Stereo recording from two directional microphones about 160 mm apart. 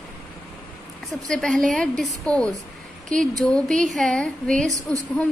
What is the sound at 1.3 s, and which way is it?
Speech, 5° left (ahead or behind).